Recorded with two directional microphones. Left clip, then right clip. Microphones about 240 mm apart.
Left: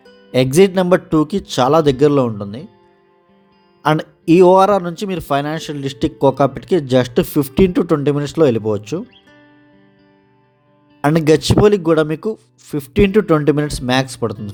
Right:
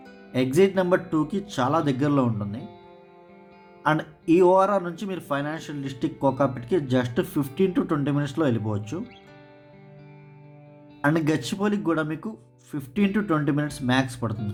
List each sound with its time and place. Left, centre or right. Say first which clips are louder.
0.3 s a man's voice: left 9 dB; left
3.8 s speech: left 8 dB; left
11.0 s speech: left 10 dB; left